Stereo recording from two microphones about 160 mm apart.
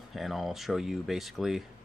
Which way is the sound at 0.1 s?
Centre (ahead or behind).